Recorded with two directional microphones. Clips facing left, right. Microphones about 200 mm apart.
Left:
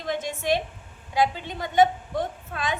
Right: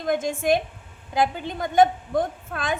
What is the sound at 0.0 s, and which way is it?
A woman's voice, 50° right (ahead or behind).